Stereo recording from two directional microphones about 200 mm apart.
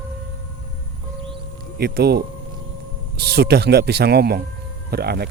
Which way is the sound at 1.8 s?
50° right (ahead or behind).